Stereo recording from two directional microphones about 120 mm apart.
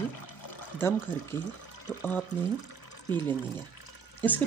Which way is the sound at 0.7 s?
20° left (ahead or behind).